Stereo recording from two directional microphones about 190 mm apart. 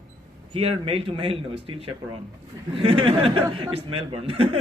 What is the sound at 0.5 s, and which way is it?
Speech, 30° right (ahead or behind).